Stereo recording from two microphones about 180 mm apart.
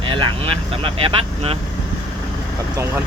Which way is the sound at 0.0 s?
25° right (ahead or behind).